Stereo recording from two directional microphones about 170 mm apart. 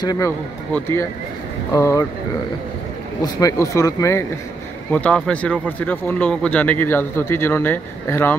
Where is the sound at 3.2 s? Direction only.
20° left (ahead or behind).